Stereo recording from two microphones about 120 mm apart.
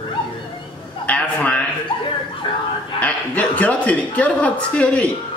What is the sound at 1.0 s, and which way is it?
Speech, 10° left (ahead or behind).